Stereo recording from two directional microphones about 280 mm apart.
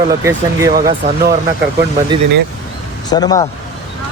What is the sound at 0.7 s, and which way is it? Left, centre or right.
Speech, right.